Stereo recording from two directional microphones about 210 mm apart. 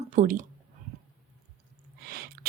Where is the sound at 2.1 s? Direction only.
45° right (ahead or behind).